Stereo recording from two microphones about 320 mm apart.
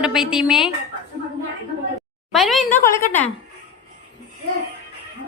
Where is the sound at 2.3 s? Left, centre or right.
Centre.